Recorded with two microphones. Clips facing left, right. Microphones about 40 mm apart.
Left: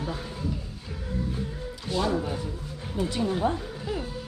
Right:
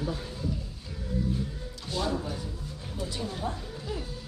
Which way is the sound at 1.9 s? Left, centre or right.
Centre.